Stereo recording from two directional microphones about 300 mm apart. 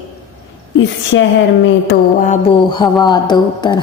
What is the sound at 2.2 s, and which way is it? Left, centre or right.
Mantra, centre.